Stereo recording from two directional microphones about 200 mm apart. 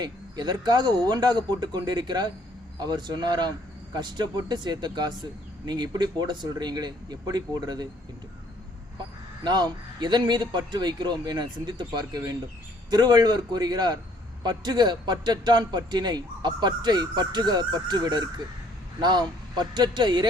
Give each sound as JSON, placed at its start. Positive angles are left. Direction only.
{"t": 0.0, "sound": "speech", "side_deg": -20}
{"t": 9.4, "sound": "speech", "side_deg": -20}